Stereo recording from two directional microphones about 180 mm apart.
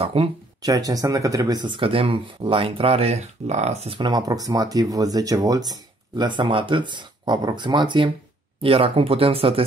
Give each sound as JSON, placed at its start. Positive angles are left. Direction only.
{"t": 0.0, "sound": "speech", "side_deg": -35}
{"t": 0.6, "sound": "speech", "side_deg": -20}